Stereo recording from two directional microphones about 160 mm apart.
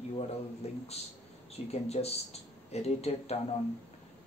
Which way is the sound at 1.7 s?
40° left (ahead or behind).